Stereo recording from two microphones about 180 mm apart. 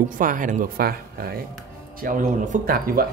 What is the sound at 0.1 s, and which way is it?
Speech, 50° right (ahead or behind).